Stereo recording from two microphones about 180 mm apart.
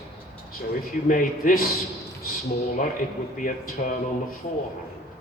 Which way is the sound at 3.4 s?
50° left (ahead or behind).